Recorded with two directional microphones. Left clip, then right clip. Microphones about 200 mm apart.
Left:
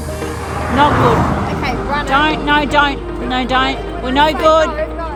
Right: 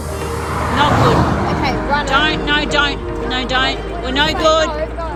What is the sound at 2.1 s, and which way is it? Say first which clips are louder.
Speech: left 4 dB; 50° left (ahead or behind).